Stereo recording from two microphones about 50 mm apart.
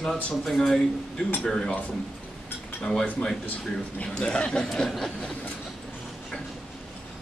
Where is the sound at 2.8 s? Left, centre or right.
Centre.